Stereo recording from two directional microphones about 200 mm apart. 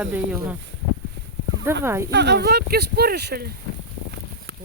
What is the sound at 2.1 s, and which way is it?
Speech, 60° right (ahead or behind).